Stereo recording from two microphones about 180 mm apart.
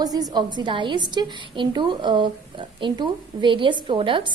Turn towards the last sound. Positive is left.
turn(degrees=-30)  # may be behind; listen again after turning